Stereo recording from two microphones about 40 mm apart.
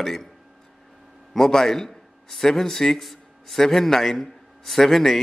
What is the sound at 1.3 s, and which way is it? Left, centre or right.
A man's voice, centre.